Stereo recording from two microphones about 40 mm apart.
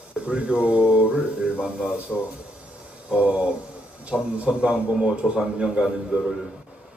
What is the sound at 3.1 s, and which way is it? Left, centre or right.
A man's voice, right.